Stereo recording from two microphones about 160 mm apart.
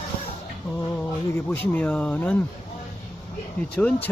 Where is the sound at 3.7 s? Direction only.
10° left (ahead or behind).